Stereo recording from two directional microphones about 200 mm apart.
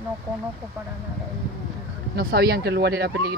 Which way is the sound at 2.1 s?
50° right (ahead or behind).